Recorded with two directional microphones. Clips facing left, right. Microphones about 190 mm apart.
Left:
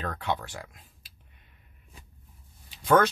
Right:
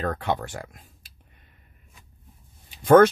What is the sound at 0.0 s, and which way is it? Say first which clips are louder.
Speech: right 5 dB; 50° right (ahead or behind).